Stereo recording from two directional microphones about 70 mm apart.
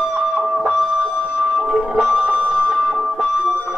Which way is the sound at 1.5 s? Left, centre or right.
Centre.